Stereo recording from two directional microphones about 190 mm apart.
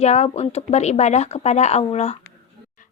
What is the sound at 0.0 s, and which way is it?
A woman's voice, 35° left (ahead or behind).